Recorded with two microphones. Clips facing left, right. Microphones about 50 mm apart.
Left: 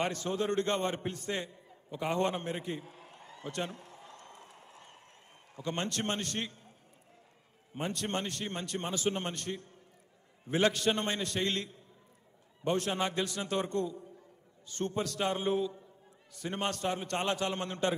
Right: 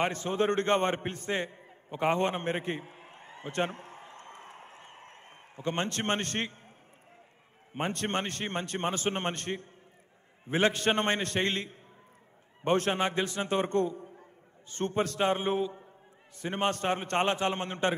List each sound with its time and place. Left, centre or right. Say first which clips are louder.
0.0 s a man's voice: right 4 dB; right
7.7 s a man's voice: right 4 dB; right